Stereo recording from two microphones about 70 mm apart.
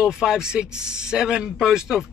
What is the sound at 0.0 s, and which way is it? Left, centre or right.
Speech, centre.